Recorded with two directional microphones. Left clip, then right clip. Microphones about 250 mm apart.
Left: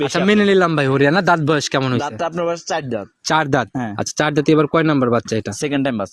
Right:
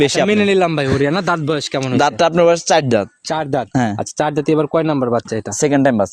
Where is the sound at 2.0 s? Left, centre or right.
Right.